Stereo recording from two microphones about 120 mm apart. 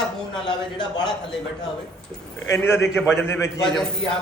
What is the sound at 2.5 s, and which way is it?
A man's voice, 20° left (ahead or behind).